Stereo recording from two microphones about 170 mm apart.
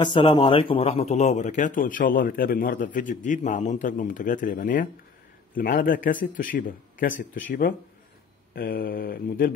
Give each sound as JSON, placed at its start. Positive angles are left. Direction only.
{"t": 0.0, "sound": "a man's voice", "side_deg": 25}
{"t": 8.5, "sound": "mantra", "side_deg": 60}